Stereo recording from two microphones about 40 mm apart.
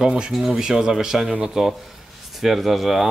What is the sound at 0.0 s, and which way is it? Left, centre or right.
Speech, centre.